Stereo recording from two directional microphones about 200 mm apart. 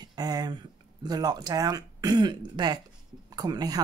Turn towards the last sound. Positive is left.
turn(degrees=-20)  # may be behind; listen again after turning